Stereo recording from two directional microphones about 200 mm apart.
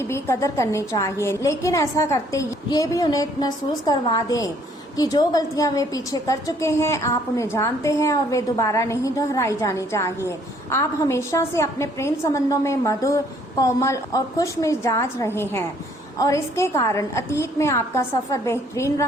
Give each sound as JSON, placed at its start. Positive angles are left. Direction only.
{"t": 0.1, "sound": "a woman's voice", "side_deg": 15}